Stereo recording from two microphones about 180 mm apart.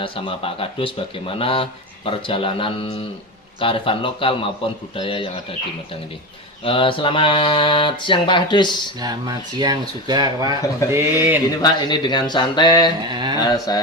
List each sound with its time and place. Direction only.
0.0 s speech: 30° left (ahead or behind)
6.7 s speech: 30° left (ahead or behind)
9.0 s speech: 20° right (ahead or behind)
11.6 s speech: 25° left (ahead or behind)
13.0 s speech: 25° right (ahead or behind)
13.4 s speech: 20° left (ahead or behind)